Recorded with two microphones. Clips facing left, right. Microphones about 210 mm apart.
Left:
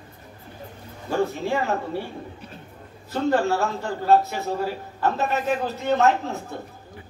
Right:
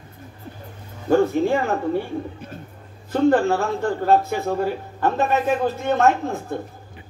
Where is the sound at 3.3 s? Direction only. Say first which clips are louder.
Right 3 dB; 50° right (ahead or behind).